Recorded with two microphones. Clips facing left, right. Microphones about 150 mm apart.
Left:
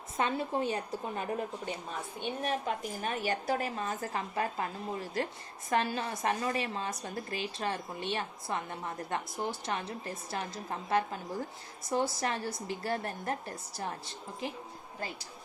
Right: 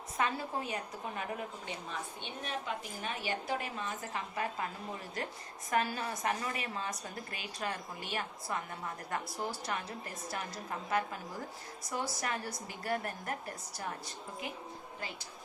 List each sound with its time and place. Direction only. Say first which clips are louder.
0.2 s a woman's voice: left 4 dB; 25° left (ahead or behind)
2.2 s a woman's voice: left 9 dB; 45° left (ahead or behind)
5.7 s a woman's voice: left 2 dB; 30° left (ahead or behind)
14.4 s a woman's voice: left 5 dB; 30° left (ahead or behind)